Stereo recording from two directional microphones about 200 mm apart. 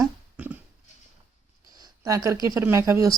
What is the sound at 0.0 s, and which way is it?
Dog, 10° right (ahead or behind).